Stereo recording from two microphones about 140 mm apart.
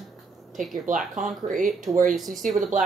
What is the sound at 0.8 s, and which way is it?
Speech, 70° right (ahead or behind).